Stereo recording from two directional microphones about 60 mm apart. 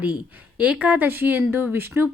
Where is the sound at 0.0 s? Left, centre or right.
Centre.